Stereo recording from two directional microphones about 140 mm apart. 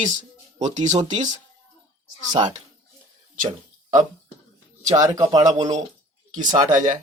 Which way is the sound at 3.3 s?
65° right (ahead or behind).